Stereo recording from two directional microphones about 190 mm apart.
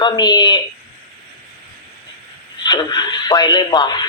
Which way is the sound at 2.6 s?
20° left (ahead or behind).